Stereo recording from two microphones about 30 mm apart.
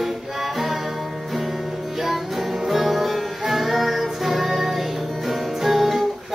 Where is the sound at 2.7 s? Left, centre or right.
Centre.